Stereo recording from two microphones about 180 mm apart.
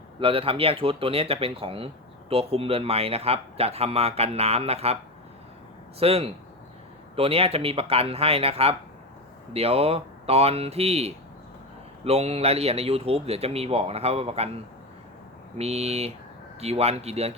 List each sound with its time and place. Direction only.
0.2 s speech: 30° right (ahead or behind)
6.0 s speech: 35° right (ahead or behind)